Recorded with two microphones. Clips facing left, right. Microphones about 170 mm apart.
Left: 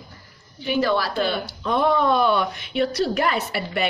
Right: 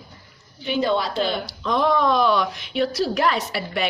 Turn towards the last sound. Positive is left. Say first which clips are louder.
# even
turn(degrees=0)  # may be behind; listen again after turning